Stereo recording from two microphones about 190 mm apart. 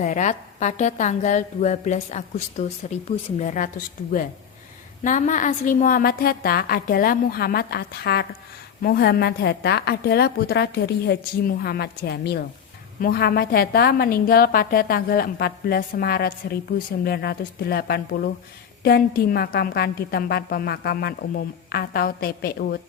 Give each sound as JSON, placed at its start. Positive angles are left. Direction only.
{"t": 0.0, "sound": "a woman's voice", "side_deg": 40}
{"t": 5.0, "sound": "a woman's voice", "side_deg": 40}